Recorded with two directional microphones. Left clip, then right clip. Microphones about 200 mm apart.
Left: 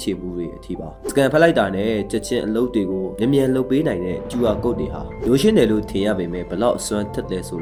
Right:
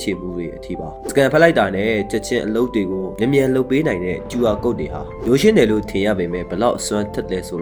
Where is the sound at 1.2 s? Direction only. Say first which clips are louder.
Right 2 dB; 15° right (ahead or behind).